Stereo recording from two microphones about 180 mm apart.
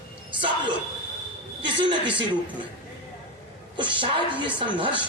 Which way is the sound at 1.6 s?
25° right (ahead or behind).